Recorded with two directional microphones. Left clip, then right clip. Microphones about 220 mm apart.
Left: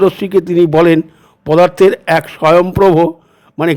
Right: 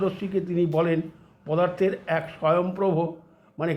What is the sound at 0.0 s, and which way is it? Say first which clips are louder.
A man's voice: left 16 dB; 50° left (ahead or behind).